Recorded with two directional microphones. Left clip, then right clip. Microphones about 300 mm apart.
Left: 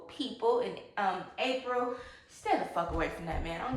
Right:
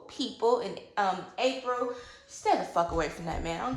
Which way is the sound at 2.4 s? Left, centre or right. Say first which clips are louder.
Right 4 dB; centre.